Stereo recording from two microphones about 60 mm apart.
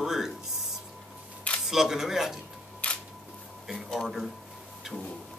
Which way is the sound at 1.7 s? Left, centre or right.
Centre.